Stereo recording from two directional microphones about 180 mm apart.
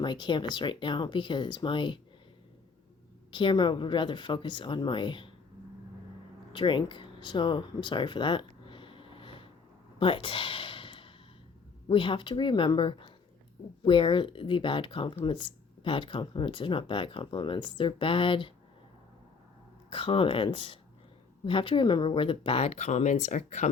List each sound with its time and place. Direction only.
0.0 s speech: 25° left (ahead or behind)
3.3 s speech: 25° left (ahead or behind)
6.5 s a sound: 25° left (ahead or behind)
11.9 s speech: 30° left (ahead or behind)
19.9 s speech: 30° left (ahead or behind)